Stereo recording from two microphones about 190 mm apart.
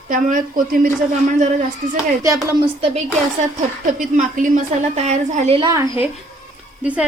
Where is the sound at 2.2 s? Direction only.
15° right (ahead or behind).